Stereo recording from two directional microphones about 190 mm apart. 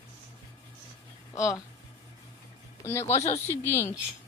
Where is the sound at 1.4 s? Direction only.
15° left (ahead or behind).